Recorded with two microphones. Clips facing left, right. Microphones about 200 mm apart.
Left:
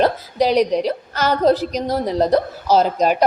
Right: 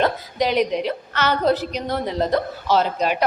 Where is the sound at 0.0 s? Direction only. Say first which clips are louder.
Left 4 dB; 35° left (ahead or behind).